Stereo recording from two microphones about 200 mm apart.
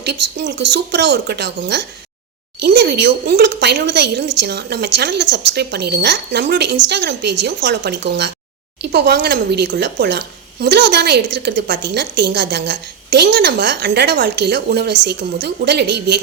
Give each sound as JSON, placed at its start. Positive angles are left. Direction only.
{"t": 0.0, "sound": "a woman's voice", "side_deg": -55}